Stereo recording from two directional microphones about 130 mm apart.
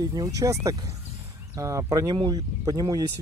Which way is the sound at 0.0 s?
30° right (ahead or behind).